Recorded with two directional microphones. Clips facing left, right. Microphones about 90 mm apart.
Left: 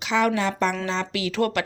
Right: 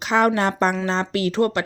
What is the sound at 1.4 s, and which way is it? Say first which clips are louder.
Speech: right 2 dB; 30° right (ahead or behind).